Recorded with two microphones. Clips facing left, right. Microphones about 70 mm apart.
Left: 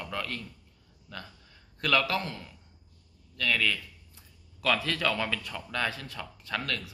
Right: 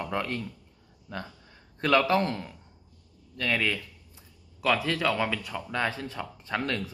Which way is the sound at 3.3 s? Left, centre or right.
Right.